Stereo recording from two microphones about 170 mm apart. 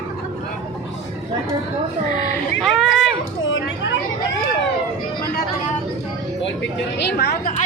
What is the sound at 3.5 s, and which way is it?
Chatter, 90° left.